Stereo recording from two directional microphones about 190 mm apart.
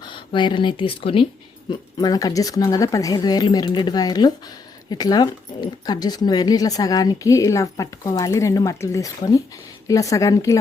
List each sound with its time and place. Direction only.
0.0 s a woman's voice: 25° left (ahead or behind)